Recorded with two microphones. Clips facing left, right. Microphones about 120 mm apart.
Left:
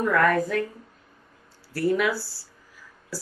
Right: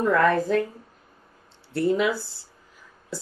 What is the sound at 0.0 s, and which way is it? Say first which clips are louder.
Speech: right 1 dB; 25° right (ahead or behind).